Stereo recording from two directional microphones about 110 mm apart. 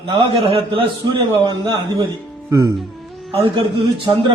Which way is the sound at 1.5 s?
45° right (ahead or behind).